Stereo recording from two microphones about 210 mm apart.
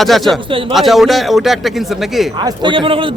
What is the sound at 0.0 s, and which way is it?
A man's voice, centre (ahead or behind).